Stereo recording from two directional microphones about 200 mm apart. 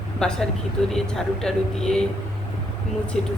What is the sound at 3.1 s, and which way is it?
Speech, centre (ahead or behind).